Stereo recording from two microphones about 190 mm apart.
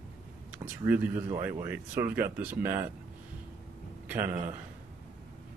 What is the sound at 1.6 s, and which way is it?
Speech, 10° right (ahead or behind).